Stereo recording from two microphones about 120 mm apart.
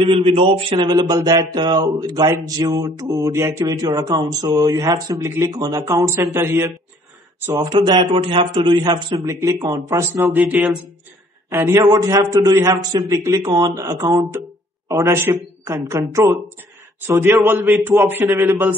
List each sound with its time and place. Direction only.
0.0 s a man's voice: 50° right (ahead or behind); by 6.7 s 20° right (ahead or behind)
7.5 s a man's voice: 35° right (ahead or behind)
10.5 s speech: 5° right (ahead or behind)
11.5 s speech: 25° right (ahead or behind)